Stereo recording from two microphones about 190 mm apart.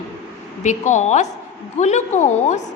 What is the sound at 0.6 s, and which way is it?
A woman's voice, 40° left (ahead or behind).